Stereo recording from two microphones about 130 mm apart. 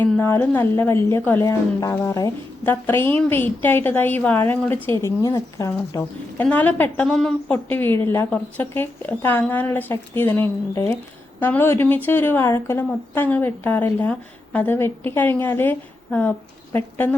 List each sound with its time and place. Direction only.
0.0 s a woman's voice: 15° left (ahead or behind)